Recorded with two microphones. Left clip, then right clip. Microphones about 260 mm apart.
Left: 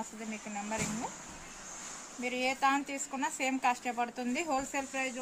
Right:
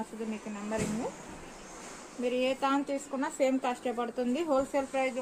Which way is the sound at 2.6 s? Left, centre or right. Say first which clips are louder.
Even; left.